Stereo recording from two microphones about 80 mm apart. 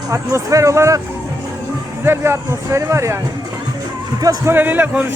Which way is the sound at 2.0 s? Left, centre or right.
Right.